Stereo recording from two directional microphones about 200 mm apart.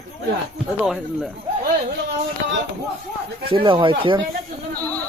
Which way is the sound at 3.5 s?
25° right (ahead or behind).